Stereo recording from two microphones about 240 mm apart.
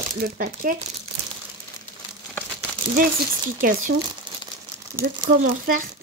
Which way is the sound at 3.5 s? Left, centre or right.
Right.